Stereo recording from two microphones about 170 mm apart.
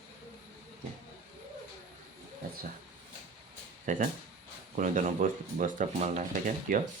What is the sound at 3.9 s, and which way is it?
Speech, 50° right (ahead or behind).